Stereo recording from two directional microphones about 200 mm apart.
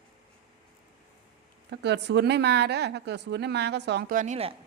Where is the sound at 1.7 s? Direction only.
60° right (ahead or behind); by 4.5 s 35° right (ahead or behind).